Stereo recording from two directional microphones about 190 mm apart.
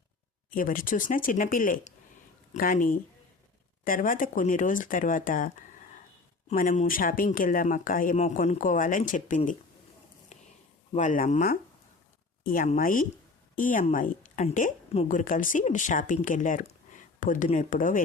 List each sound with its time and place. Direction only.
0.5 s a woman's voice: 45° left (ahead or behind)
10.9 s a woman's voice: 40° left (ahead or behind)